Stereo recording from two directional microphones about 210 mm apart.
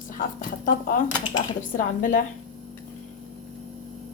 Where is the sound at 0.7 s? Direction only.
40° left (ahead or behind).